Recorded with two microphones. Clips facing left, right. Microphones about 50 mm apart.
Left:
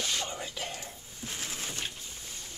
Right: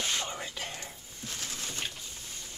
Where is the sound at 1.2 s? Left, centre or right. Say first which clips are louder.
Left 1 dB; centre.